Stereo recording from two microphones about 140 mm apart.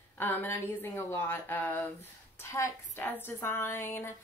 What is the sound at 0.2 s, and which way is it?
Speech, 15° left (ahead or behind).